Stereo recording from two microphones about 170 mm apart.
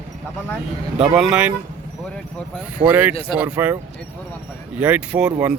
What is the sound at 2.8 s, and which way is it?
Speech, 10° right (ahead or behind).